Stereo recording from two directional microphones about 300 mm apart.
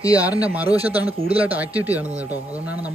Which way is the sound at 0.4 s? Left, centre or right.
Centre.